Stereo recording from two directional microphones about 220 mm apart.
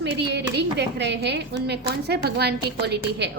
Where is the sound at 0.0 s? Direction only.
50° right (ahead or behind).